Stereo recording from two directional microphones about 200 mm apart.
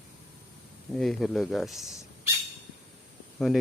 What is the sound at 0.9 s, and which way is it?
Speech, centre (ahead or behind).